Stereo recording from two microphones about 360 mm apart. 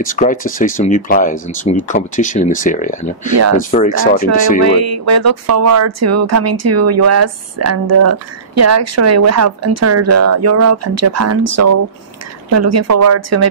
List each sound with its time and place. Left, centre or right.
0.0 s speech: left
4.6 s speech: right